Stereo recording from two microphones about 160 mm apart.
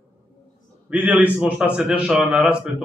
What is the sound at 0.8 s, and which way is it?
A man's voice, 10° right (ahead or behind).